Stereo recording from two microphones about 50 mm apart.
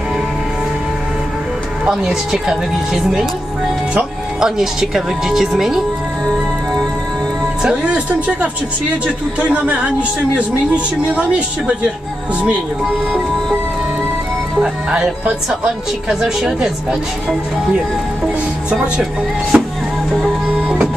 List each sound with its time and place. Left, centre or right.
1.9 s speech: centre
4.4 s speech: centre
7.6 s speech: right
9.0 s speech: right
14.6 s speech: centre
16.1 s speech: centre
19.5 s music: right